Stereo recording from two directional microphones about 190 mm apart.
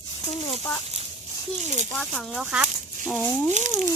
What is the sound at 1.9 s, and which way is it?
Speech, 5° left (ahead or behind).